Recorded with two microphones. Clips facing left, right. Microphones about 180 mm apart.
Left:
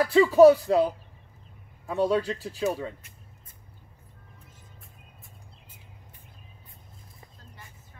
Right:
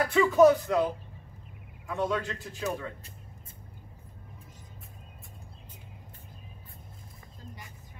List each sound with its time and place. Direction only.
0.1 s speech: 30° left (ahead or behind)
1.9 s speech: 35° left (ahead or behind)